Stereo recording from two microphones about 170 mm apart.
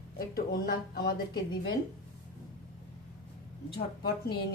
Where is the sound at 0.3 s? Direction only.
60° left (ahead or behind).